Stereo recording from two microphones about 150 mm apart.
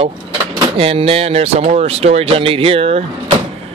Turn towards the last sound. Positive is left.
turn(degrees=-40)  # may be behind; listen again after turning